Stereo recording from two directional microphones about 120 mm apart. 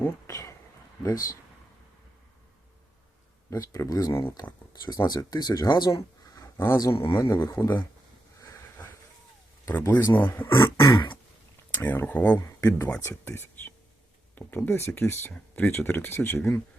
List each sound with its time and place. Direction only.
0.0 s speech: 25° left (ahead or behind)
3.5 s speech: 25° left (ahead or behind)
6.9 s speech: 45° left (ahead or behind)
7.2 s speech: 20° left (ahead or behind)
8.4 s a sound: 25° left (ahead or behind)
9.6 s speech: 25° left (ahead or behind)
10.8 s throat clearing: 40° left (ahead or behind)
11.7 s speech: 15° left (ahead or behind)